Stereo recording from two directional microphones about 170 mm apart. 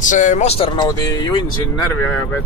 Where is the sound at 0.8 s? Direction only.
25° left (ahead or behind).